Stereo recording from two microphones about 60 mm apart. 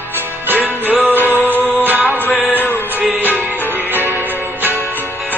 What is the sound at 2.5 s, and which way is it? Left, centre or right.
Music, left.